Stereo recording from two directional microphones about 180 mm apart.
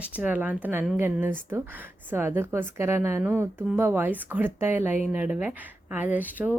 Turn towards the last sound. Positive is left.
turn(degrees=-10)  # may be behind; listen again after turning